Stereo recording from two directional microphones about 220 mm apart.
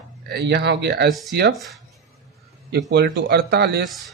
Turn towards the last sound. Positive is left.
turn(degrees=-45)  # may be behind; listen again after turning